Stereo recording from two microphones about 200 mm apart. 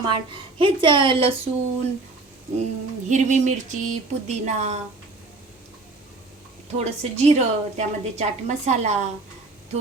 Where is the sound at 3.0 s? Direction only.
35° right (ahead or behind).